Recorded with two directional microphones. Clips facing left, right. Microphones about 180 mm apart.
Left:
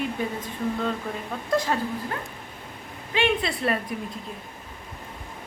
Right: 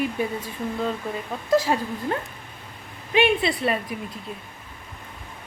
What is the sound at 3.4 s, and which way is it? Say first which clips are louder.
Speech: right 2 dB; centre (ahead or behind).